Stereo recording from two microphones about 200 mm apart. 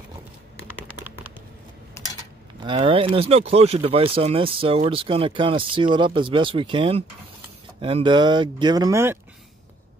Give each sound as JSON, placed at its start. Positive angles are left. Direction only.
{"t": 2.6, "sound": "speech", "side_deg": -25}